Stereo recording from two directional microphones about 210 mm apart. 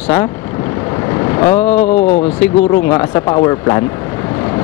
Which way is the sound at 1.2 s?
15° left (ahead or behind).